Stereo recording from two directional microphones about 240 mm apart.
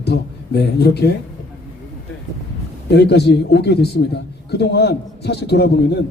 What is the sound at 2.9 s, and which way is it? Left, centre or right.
A man's voice, left.